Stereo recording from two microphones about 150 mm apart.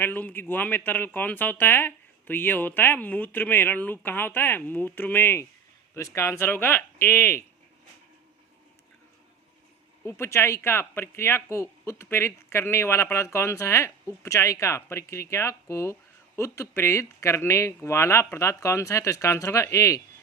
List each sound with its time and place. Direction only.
0.0 s speech: 10° left (ahead or behind)
10.0 s speech: 15° left (ahead or behind)